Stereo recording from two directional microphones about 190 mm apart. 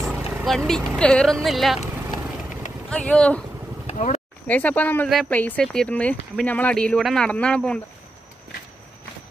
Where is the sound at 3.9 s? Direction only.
35° left (ahead or behind).